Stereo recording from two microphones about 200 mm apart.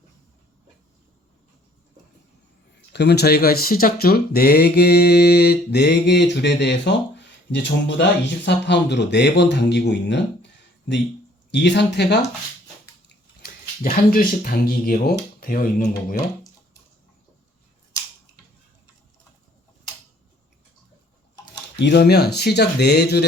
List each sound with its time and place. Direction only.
2.9 s a man's voice: 55° left (ahead or behind)
13.4 s speech: 45° left (ahead or behind)
21.8 s speech: 60° left (ahead or behind)